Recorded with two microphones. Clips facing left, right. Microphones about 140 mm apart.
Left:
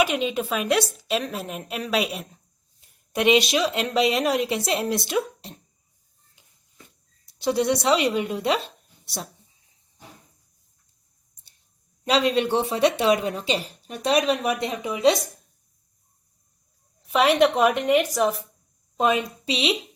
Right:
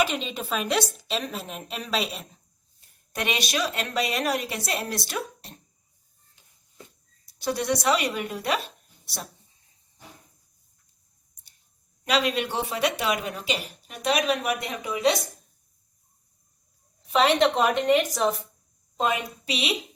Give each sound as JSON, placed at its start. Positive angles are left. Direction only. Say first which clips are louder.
{"t": 0.0, "sound": "a woman's voice", "louder": "left 4 dB", "side_deg": 5}
{"t": 3.2, "sound": "speech", "louder": "left 8 dB", "side_deg": 20}
{"t": 7.3, "sound": "speech", "louder": "left 4 dB", "side_deg": 25}
{"t": 12.0, "sound": "speech", "louder": "left 4 dB", "side_deg": 30}
{"t": 17.1, "sound": "a woman's voice", "louder": "left 2 dB", "side_deg": 5}
{"t": 18.9, "sound": "a woman's voice", "louder": "left 4 dB", "side_deg": 20}